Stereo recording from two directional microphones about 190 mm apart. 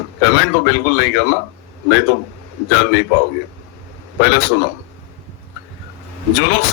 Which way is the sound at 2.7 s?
65° left (ahead or behind).